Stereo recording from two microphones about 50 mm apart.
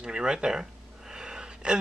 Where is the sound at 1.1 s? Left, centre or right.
Centre.